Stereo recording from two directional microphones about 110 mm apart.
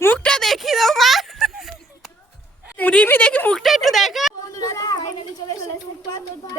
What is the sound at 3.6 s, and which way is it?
Speech, centre (ahead or behind).